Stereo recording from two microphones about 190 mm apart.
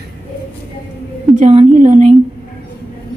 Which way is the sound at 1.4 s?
35° right (ahead or behind).